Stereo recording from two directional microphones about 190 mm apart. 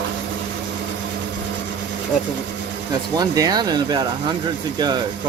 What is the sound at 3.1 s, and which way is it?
Speech, 20° right (ahead or behind).